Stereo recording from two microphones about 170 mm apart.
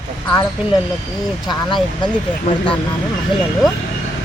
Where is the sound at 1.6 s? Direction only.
25° left (ahead or behind).